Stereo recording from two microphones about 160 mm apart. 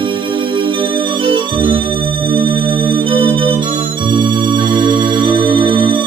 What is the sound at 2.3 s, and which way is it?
Music, 30° right (ahead or behind).